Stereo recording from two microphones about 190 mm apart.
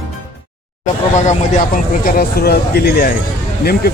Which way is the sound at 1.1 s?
40° left (ahead or behind).